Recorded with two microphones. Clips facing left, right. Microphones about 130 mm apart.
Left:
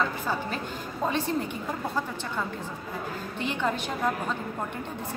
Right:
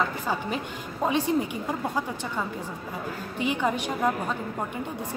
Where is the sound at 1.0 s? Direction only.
10° right (ahead or behind).